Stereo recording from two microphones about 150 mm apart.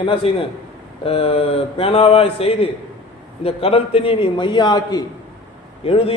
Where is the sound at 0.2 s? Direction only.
40° left (ahead or behind); by 5.0 s 25° left (ahead or behind).